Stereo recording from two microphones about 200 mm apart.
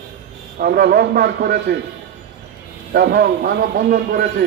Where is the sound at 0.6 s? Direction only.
55° right (ahead or behind).